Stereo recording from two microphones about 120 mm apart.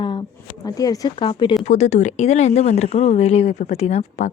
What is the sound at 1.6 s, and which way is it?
Speech, 65° left (ahead or behind).